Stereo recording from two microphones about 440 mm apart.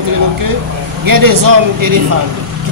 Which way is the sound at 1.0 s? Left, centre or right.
Right.